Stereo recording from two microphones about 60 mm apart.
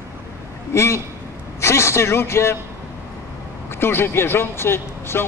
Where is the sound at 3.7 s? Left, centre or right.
Left.